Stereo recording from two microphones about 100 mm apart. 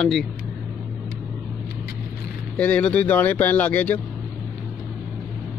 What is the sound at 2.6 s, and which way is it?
Speech, 10° left (ahead or behind).